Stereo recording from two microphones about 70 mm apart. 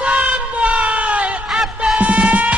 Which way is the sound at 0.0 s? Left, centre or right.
Centre.